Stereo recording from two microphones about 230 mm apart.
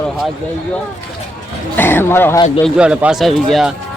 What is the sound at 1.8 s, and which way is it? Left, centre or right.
Speech, centre.